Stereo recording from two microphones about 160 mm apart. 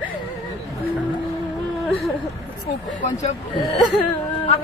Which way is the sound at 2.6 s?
45° left (ahead or behind).